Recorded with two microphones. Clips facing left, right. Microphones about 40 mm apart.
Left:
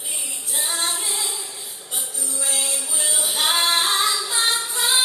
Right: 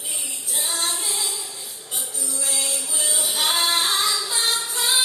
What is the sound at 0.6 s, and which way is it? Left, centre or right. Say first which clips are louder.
Female singing: left 1 dB; centre.